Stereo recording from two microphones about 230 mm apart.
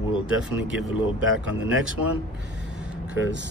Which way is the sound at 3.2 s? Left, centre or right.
Right.